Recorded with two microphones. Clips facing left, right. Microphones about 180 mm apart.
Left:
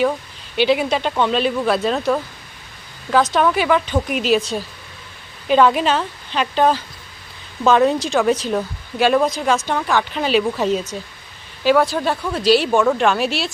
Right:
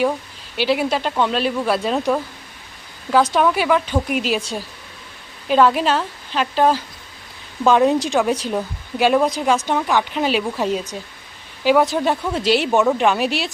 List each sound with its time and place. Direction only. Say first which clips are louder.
0.5 s speech: left 2 dB; 5° right (ahead or behind)